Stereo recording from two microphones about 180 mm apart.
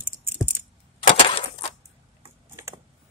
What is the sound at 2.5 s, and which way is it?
Typing, 15° right (ahead or behind).